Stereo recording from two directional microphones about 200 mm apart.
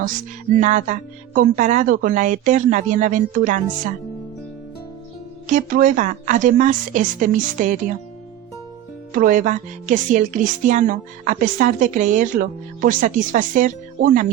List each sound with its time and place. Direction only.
0.5 s speech: 40° right (ahead or behind)
5.5 s speech: 40° right (ahead or behind)
9.1 s speech: 40° right (ahead or behind)